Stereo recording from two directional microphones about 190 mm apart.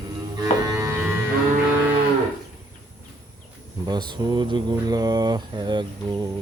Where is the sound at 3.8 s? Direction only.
25° right (ahead or behind).